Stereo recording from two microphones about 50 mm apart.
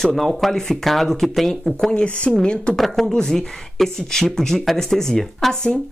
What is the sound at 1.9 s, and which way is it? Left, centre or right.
Speech, left.